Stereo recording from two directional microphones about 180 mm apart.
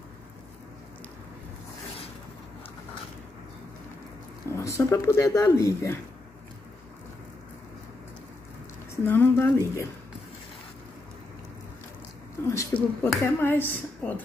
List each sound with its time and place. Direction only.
4.5 s speech: 15° left (ahead or behind)
8.9 s speech: 10° left (ahead or behind)
12.4 s speech: 10° left (ahead or behind)